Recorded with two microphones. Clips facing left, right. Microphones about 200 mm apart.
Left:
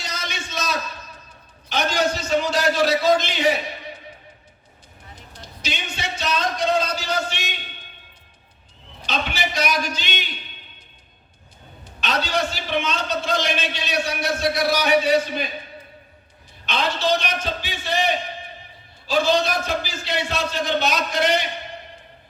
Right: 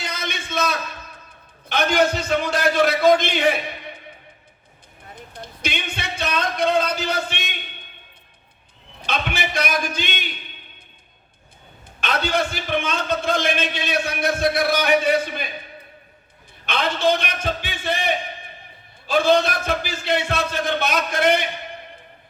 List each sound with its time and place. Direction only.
0.0 s a sound: 55° right (ahead or behind)
1.7 s a man's voice: 55° right (ahead or behind)
5.3 s a man's voice: 55° right (ahead or behind)
9.0 s a man's voice: 55° right (ahead or behind)
11.9 s a man's voice: 55° right (ahead or behind)
16.6 s a man's voice: 55° right (ahead or behind)